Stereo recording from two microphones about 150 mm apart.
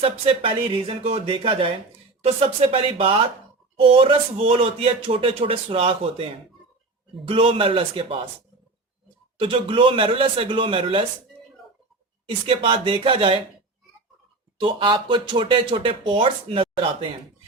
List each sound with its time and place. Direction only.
0.0 s speech: 40° right (ahead or behind)
7.3 s speech: 40° right (ahead or behind)
9.4 s speech: 35° right (ahead or behind)
12.5 s speech: 35° right (ahead or behind)
14.6 s speech: 35° right (ahead or behind)